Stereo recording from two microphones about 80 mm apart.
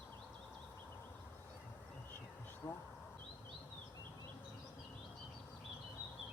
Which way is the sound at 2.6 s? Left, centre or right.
Left.